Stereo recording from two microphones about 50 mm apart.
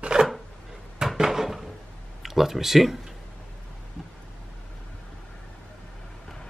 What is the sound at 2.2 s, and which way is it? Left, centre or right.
Speech, centre.